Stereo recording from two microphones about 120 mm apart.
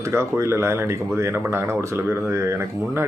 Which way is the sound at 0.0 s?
20° right (ahead or behind).